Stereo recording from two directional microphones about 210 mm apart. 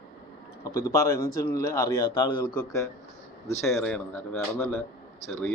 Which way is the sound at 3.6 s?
5° left (ahead or behind).